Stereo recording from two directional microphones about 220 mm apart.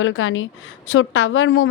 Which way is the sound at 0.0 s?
65° left (ahead or behind).